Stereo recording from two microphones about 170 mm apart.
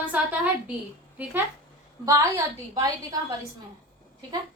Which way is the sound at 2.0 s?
20° right (ahead or behind).